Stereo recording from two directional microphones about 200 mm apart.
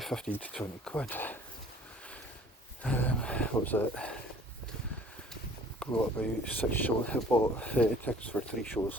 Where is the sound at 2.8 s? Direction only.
5° left (ahead or behind).